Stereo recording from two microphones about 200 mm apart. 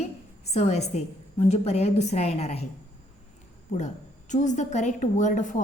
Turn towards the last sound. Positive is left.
turn(degrees=40)  # may be behind; listen again after turning